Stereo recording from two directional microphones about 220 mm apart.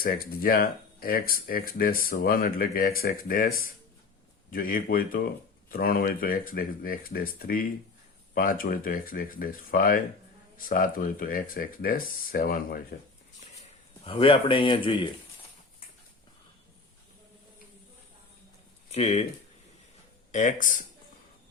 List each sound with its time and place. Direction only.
0.0 s speech: 40° left (ahead or behind)
4.5 s speech: 40° left (ahead or behind)
14.0 s speech: 25° left (ahead or behind)
18.9 s speech: 30° left (ahead or behind)
20.3 s speech: 35° left (ahead or behind)